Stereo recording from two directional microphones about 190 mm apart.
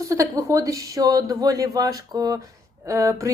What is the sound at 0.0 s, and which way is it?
A woman's voice, 15° right (ahead or behind).